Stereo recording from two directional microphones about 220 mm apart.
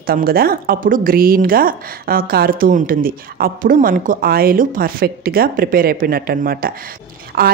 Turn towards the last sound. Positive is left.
turn(degrees=-45)  # may be behind; listen again after turning